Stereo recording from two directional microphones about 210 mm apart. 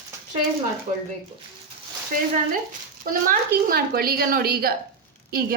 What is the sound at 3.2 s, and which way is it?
A woman's voice, 45° right (ahead or behind).